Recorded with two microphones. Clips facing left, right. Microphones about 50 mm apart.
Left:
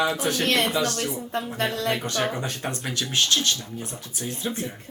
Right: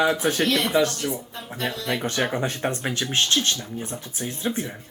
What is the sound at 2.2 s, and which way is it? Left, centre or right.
Speech, centre.